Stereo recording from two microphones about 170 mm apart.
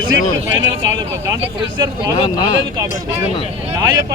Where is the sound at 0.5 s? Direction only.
20° right (ahead or behind).